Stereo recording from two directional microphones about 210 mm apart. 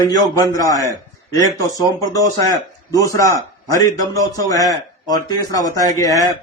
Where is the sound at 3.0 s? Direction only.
15° left (ahead or behind).